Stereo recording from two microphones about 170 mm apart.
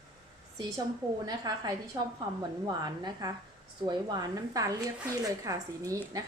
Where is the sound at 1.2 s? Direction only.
25° right (ahead or behind).